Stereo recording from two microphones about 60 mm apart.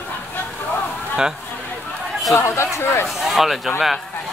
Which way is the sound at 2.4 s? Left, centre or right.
Left.